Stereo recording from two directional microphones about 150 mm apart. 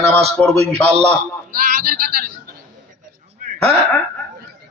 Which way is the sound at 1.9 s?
90° right.